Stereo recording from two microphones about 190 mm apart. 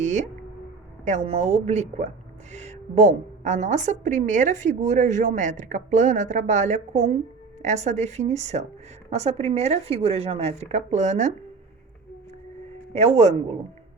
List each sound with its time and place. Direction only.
0.0 s a sound: 40° right (ahead or behind)
1.0 s a woman's voice: 35° right (ahead or behind)
12.9 s a woman's voice: 35° right (ahead or behind)